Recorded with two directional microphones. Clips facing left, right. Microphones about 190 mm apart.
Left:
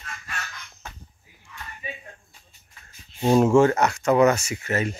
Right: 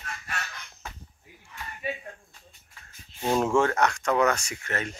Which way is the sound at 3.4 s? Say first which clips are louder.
Left 4 dB; 5° left (ahead or behind).